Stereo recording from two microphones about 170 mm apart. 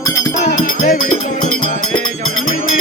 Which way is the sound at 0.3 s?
50° left (ahead or behind).